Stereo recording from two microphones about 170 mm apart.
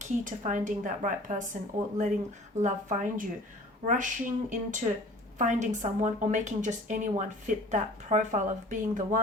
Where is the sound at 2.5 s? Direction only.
45° right (ahead or behind).